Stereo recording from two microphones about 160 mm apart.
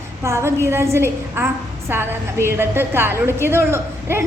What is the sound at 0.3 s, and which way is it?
A woman's voice, 15° right (ahead or behind).